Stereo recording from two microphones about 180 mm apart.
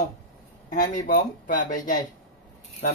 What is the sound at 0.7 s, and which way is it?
Speech, 50° left (ahead or behind).